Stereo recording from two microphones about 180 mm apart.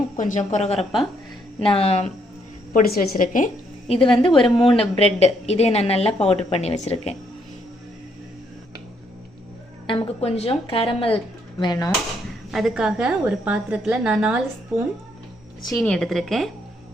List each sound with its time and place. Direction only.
0.2 s a woman's voice: 45° left (ahead or behind)
2.7 s a woman's voice: 55° left (ahead or behind)
3.8 s a woman's voice: 30° left (ahead or behind)
9.8 s a woman's voice: 30° left (ahead or behind)
12.5 s a woman's voice: centre (ahead or behind)
15.7 s a woman's voice: centre (ahead or behind)